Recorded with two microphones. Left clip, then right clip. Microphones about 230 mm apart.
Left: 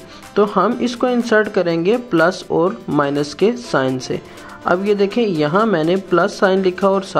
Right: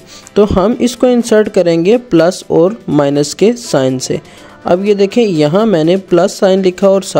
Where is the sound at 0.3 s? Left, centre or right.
Right.